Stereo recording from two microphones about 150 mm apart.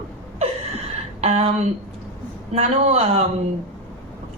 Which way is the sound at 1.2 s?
45° right (ahead or behind).